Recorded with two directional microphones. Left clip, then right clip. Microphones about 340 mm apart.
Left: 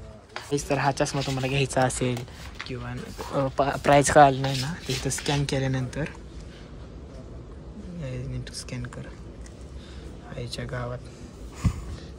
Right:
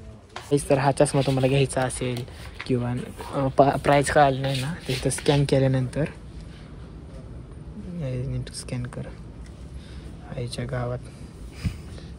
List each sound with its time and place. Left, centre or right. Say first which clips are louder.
0.5 s speech: right 4 dB; centre
8.0 s a sound: right 4 dB; centre
10.3 s speech: right 3 dB; centre